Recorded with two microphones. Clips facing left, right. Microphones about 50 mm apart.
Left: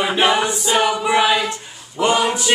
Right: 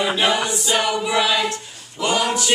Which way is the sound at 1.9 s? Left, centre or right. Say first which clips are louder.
Left 3 dB; left.